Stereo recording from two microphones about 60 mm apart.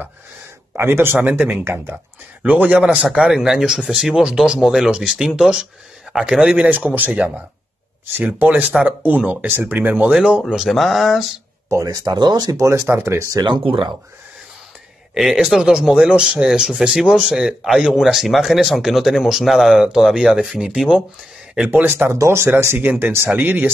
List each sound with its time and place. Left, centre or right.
0.7 s speech: right
2.4 s speech: right
3.2 s speech: centre
6.8 s speech: right
10.1 s speech: centre
10.7 s speech: centre
11.7 s speech: right
12.8 s speech: right
13.1 s speech: right
15.3 s speech: centre
21.6 s speech: right
22.1 s speech: right